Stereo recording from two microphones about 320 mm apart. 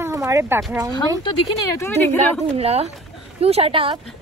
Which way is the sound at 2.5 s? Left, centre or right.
Centre.